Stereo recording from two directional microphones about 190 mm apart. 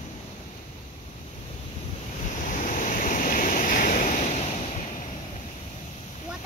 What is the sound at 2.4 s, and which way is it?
Waves, 45° left (ahead or behind).